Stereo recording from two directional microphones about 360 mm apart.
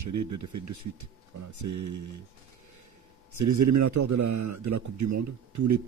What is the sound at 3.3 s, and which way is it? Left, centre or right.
A man's voice, right.